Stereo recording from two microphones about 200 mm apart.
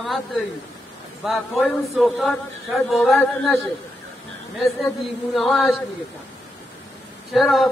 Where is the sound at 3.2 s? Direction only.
15° left (ahead or behind).